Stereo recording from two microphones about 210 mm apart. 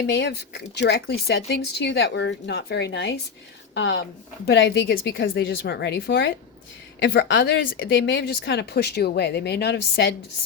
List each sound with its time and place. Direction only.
0.1 s a woman's voice: 55° left (ahead or behind)